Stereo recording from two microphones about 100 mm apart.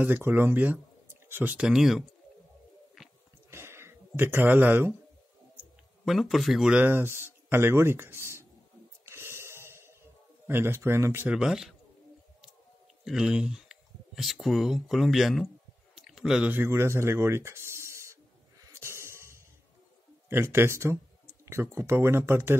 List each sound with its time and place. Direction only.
0.0 s speech: 20° right (ahead or behind)
1.7 s speech: 5° right (ahead or behind)
3.0 s a sound: centre (ahead or behind)
3.4 s a sound: 25° right (ahead or behind)
6.0 s speech: centre (ahead or behind)
6.8 s speech: 25° right (ahead or behind)
9.0 s snort: 25° right (ahead or behind)
10.4 s speech: 25° right (ahead or behind)
11.2 s speech: 5° right (ahead or behind)
13.0 s speech: 5° right (ahead or behind)
15.9 s a sound: 5° right (ahead or behind)
16.5 s speech: 25° right (ahead or behind)
18.6 s music: 30° right (ahead or behind)
20.2 s speech: 25° right (ahead or behind)